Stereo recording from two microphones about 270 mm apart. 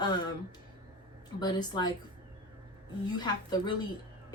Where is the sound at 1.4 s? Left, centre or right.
Centre.